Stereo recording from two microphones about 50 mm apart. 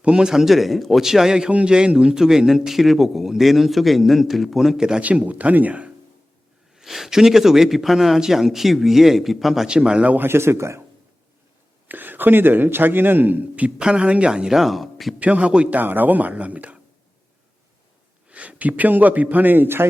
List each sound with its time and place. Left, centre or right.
0.0 s a man's voice: centre
5.0 s speech: right
6.7 s a man's voice: centre
9.6 s speech: centre
10.2 s speech: right
11.9 s a man's voice: right
13.7 s speech: centre
15.2 s speech: right
15.7 s a man's voice: right
18.3 s a man's voice: right